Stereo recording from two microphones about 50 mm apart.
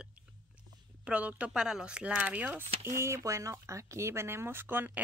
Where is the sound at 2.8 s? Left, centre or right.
Right.